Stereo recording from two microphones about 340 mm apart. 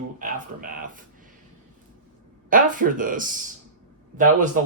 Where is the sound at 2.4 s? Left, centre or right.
Right.